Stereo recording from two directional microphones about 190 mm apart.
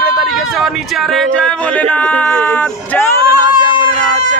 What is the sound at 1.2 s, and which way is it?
Speech, 5° left (ahead or behind).